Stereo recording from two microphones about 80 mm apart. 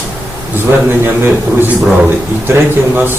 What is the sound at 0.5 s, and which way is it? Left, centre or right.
A man's voice, right.